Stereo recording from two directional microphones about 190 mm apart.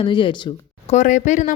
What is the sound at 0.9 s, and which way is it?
Speech, 40° left (ahead or behind).